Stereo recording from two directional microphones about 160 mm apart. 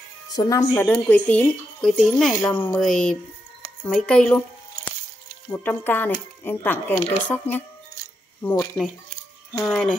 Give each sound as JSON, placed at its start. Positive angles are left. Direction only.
{"t": 0.3, "sound": "a woman's voice", "side_deg": 25}
{"t": 8.8, "sound": "speech", "side_deg": 25}
{"t": 9.6, "sound": "speech", "side_deg": 0}